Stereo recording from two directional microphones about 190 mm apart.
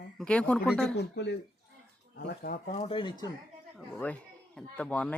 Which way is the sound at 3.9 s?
10° left (ahead or behind).